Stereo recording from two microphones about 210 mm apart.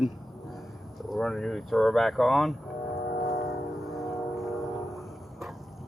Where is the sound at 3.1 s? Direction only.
45° left (ahead or behind).